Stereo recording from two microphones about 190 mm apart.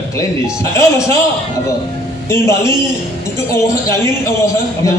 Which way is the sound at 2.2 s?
15° left (ahead or behind).